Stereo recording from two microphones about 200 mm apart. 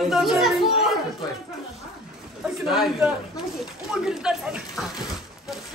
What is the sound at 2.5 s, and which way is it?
Speech, centre (ahead or behind).